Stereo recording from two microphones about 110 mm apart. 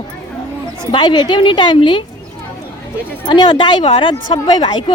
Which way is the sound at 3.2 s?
45° left (ahead or behind).